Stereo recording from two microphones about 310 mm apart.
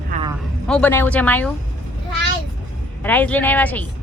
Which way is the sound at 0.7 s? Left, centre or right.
Centre.